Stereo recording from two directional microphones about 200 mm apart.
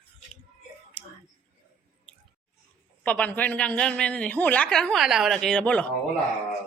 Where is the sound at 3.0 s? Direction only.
5° left (ahead or behind).